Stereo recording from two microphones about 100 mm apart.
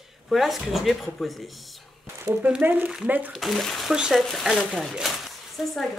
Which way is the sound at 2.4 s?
15° right (ahead or behind).